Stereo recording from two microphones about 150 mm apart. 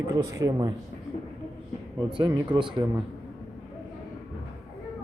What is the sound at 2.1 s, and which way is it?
Speech, 30° right (ahead or behind).